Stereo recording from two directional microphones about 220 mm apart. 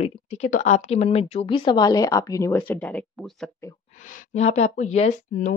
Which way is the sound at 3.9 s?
35° left (ahead or behind).